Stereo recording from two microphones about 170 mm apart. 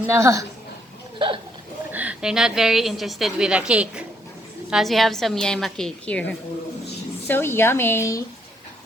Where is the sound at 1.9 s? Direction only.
10° right (ahead or behind).